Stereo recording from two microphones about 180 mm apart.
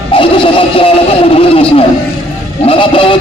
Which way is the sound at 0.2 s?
30° left (ahead or behind).